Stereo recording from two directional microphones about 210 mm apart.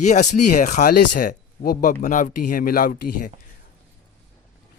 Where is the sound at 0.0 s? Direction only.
35° left (ahead or behind).